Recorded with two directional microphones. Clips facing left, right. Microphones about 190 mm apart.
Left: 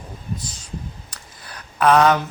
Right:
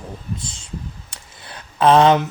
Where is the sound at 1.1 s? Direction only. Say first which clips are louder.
Right 1 dB; 25° right (ahead or behind).